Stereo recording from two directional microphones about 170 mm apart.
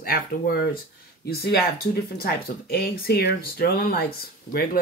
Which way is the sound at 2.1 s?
65° left (ahead or behind).